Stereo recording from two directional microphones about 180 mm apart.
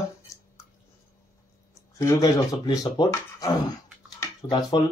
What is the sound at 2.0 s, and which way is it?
Speech, 20° left (ahead or behind).